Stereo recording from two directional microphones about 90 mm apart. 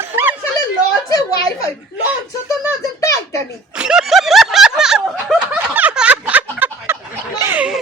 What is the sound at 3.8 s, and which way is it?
Snicker, 5° right (ahead or behind).